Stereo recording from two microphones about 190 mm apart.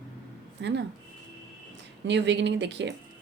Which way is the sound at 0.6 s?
65° right (ahead or behind).